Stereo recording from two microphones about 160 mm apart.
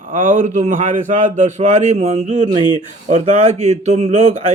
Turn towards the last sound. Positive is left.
turn(degrees=-45)  # may be behind; listen again after turning